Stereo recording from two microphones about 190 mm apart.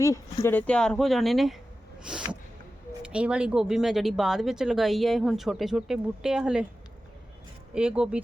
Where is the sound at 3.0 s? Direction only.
5° right (ahead or behind).